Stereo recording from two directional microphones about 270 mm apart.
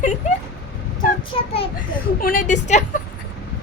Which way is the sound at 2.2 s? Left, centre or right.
Left.